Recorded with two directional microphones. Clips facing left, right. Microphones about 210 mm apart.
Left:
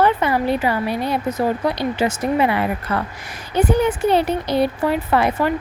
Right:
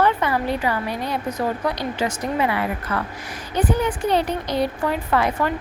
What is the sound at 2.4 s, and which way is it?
Speech, 35° left (ahead or behind).